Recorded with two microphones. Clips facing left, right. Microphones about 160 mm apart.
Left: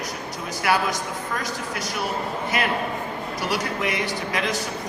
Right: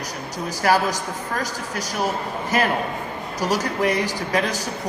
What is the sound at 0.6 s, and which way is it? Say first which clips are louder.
Speech: right 4 dB; 40° right (ahead or behind).